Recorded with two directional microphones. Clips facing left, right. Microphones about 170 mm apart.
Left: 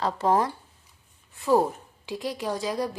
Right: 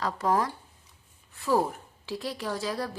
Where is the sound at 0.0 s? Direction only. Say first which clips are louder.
Left 3 dB; 25° left (ahead or behind).